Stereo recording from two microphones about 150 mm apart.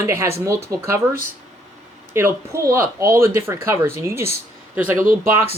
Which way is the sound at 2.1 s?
15° right (ahead or behind).